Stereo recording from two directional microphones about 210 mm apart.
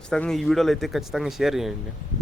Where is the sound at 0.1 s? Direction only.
5° left (ahead or behind).